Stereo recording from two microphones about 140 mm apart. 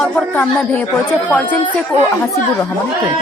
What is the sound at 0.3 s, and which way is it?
A woman's voice, 10° left (ahead or behind).